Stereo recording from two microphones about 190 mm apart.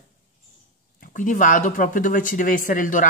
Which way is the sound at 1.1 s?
40° left (ahead or behind).